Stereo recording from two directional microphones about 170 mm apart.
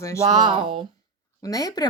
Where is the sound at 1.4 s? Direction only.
20° left (ahead or behind).